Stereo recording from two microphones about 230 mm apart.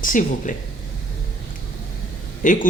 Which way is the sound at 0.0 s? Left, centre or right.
Left.